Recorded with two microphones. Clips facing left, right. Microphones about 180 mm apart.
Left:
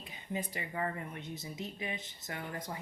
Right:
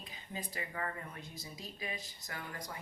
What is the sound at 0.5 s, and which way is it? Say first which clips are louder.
Speech: left 4 dB; 20° left (ahead or behind).